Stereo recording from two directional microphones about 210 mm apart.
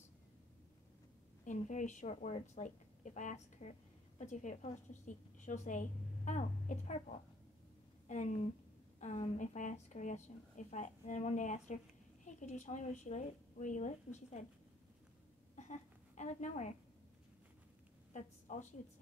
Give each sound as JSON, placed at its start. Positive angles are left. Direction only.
{"t": 1.4, "sound": "a woman's voice", "side_deg": 35}
{"t": 15.5, "sound": "a woman's voice", "side_deg": 35}
{"t": 18.1, "sound": "a woman's voice", "side_deg": 35}